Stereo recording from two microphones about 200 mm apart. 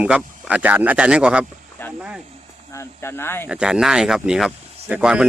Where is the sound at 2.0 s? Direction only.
5° right (ahead or behind).